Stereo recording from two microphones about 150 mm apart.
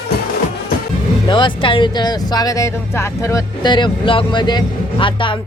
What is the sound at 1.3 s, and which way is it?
Speech, 35° left (ahead or behind).